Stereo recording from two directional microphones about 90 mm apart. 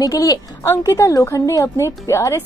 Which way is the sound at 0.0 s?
40° left (ahead or behind).